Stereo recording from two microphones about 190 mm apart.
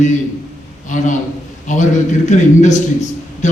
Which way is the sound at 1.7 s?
40° left (ahead or behind).